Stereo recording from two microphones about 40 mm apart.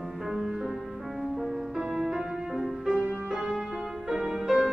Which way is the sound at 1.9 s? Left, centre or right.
Centre.